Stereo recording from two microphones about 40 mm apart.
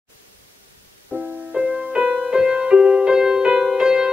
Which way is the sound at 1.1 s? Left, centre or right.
Right.